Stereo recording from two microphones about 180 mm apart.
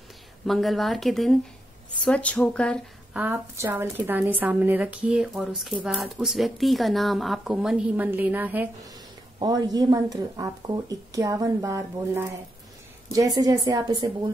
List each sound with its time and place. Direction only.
0.5 s speech: centre (ahead or behind)
3.1 s a woman's voice: 10° right (ahead or behind)
9.4 s speech: 20° right (ahead or behind)